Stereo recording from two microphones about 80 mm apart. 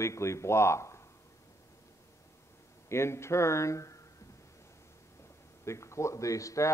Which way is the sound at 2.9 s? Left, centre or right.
Left.